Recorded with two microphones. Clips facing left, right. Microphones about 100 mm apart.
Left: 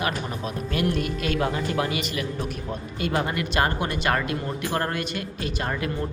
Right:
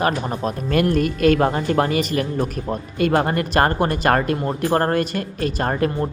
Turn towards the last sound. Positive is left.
turn(degrees=-45)  # may be behind; listen again after turning